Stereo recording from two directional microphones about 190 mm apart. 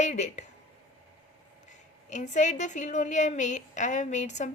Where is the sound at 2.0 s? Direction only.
40° left (ahead or behind).